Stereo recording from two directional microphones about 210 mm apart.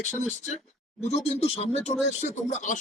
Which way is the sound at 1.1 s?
30° left (ahead or behind).